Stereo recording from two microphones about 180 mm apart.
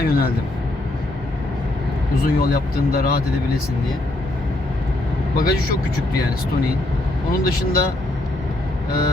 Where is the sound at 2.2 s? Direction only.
55° left (ahead or behind).